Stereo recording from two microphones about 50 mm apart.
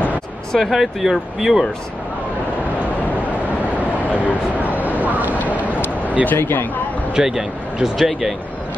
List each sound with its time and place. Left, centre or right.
0.7 s speech: centre
3.7 s vehicle: left
4.6 s vehicle: right
5.7 s a sound: left
6.3 s speech: left
7.2 s speech: centre